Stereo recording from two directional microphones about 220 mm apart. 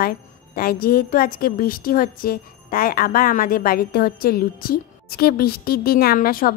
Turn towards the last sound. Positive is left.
turn(degrees=40)  # may be behind; listen again after turning